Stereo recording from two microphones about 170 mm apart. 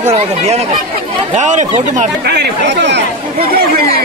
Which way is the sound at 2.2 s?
80° right.